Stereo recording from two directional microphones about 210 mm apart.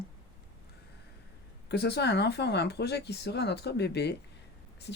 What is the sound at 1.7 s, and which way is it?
Speech, 50° left (ahead or behind).